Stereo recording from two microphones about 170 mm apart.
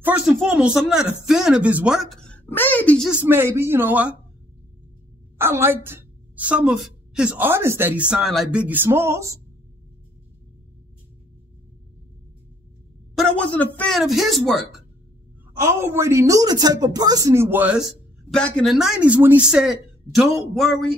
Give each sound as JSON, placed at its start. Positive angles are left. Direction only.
{"t": 0.0, "sound": "speech", "side_deg": -5}
{"t": 3.1, "sound": "a woman's voice", "side_deg": -10}
{"t": 5.4, "sound": "a woman's voice", "side_deg": -15}
{"t": 13.1, "sound": "speech", "side_deg": 5}
{"t": 15.6, "sound": "a woman's voice", "side_deg": -15}